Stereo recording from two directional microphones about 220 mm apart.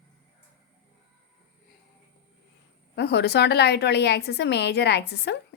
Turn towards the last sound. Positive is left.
turn(degrees=50)  # may be behind; listen again after turning